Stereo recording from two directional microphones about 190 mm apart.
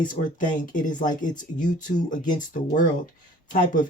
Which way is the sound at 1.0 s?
45° left (ahead or behind).